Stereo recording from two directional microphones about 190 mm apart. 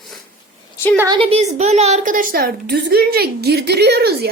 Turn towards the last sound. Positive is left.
turn(degrees=-60)  # may be behind; listen again after turning